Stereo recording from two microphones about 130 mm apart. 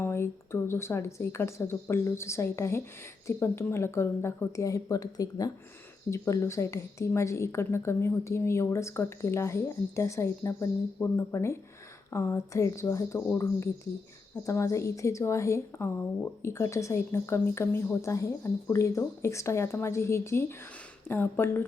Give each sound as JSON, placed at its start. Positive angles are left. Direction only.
{"t": 0.0, "sound": "a woman's voice", "side_deg": 20}